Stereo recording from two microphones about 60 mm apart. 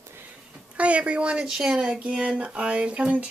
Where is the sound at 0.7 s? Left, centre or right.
Right.